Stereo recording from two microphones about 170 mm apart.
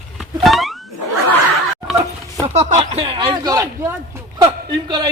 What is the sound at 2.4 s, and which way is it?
A man's voice, 40° right (ahead or behind).